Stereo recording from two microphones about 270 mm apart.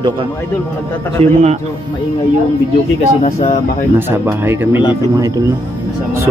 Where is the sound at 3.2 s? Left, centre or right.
Left.